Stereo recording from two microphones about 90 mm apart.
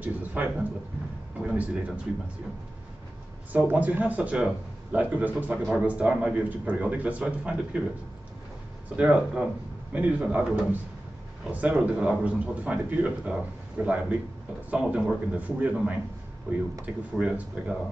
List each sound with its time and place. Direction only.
0.0 s a man's voice: 20° right (ahead or behind)
3.5 s a man's voice: 20° right (ahead or behind)
8.8 s a man's voice: 15° right (ahead or behind)